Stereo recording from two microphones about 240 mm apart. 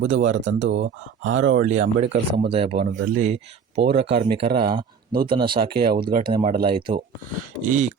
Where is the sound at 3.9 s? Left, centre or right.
Right.